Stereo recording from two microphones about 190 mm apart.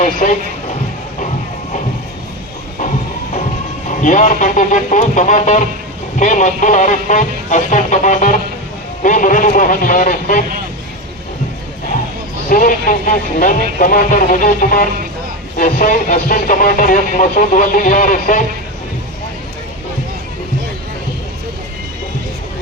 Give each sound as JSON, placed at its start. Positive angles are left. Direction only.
{"t": 0.0, "sound": "speech", "side_deg": 40}
{"t": 3.8, "sound": "speech", "side_deg": 40}
{"t": 12.5, "sound": "speech", "side_deg": 45}